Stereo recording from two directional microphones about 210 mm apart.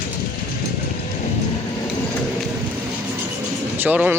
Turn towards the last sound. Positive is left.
turn(degrees=-10)  # may be behind; listen again after turning